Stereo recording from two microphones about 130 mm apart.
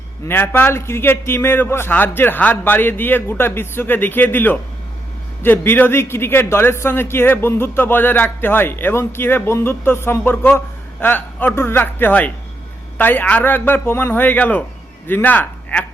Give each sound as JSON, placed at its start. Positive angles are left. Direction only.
{"t": 0.3, "sound": "a man's voice", "side_deg": 15}